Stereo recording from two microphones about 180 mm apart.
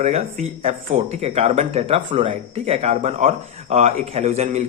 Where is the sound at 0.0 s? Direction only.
35° right (ahead or behind).